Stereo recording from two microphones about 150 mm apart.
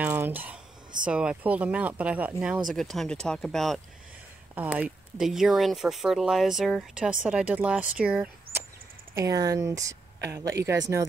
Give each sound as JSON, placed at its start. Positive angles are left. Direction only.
{"t": 0.0, "sound": "a sound", "side_deg": -15}
{"t": 1.0, "sound": "speech", "side_deg": -5}
{"t": 2.7, "sound": "speech", "side_deg": 0}
{"t": 4.6, "sound": "speech", "side_deg": -10}
{"t": 9.1, "sound": "speech", "side_deg": -25}